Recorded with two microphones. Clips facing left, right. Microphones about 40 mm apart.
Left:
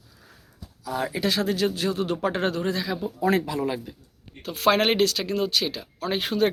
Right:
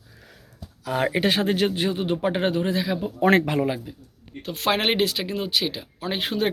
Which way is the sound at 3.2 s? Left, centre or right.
Right.